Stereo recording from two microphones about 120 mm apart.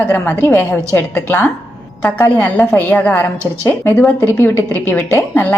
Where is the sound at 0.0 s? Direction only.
15° left (ahead or behind).